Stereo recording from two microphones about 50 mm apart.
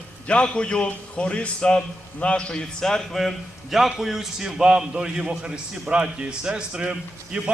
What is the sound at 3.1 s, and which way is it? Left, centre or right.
A man's voice, centre.